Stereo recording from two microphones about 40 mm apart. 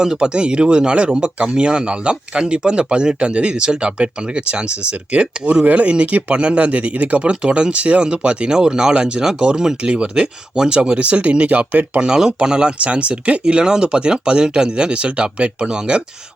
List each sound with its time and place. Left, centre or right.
0.0 s speech: centre; by 7.3 s right
7.3 s speech: right
12.0 s speech: centre